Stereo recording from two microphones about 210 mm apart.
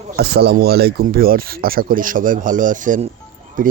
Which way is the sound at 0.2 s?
50° right (ahead or behind).